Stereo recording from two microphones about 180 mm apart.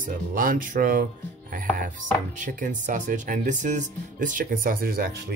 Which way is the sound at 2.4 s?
45° right (ahead or behind).